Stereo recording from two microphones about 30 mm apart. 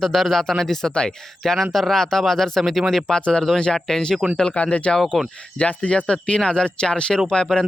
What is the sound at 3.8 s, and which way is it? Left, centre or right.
Speech, centre.